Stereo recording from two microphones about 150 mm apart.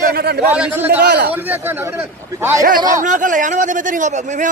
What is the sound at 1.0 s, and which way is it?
Speech, 90° right.